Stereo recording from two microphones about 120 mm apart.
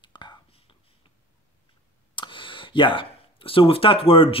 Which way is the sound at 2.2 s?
45° left (ahead or behind).